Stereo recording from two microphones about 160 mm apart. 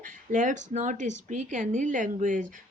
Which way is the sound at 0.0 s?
55° right (ahead or behind).